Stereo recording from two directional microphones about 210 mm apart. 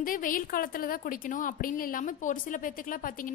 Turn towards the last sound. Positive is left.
turn(degrees=40)  # may be behind; listen again after turning